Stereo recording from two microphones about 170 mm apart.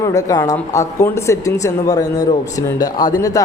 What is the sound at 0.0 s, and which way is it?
A woman's voice, 20° left (ahead or behind).